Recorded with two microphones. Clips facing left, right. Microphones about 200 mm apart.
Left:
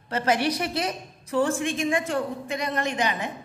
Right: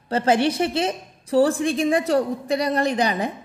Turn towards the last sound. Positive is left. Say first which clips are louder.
# right 5 dB
turn(degrees=-35)  # may be behind; listen again after turning